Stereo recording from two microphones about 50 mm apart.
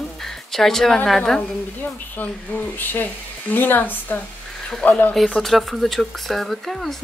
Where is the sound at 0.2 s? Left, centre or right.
Centre.